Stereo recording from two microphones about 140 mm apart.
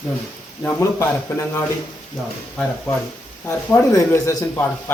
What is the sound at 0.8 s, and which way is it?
Speech, 20° left (ahead or behind).